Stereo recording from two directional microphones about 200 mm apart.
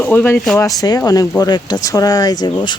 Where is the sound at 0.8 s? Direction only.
20° left (ahead or behind).